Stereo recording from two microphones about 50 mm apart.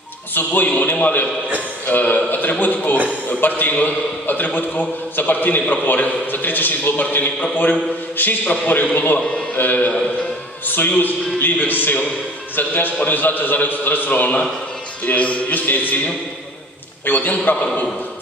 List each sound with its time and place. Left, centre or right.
0.3 s a man's voice: left
17.0 s a man's voice: left